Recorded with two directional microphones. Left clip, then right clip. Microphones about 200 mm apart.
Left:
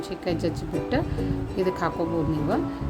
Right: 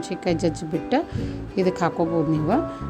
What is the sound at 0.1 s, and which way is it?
Speech, 30° right (ahead or behind).